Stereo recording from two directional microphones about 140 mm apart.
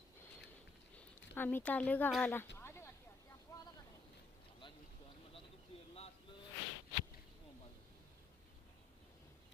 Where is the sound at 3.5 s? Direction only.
20° left (ahead or behind).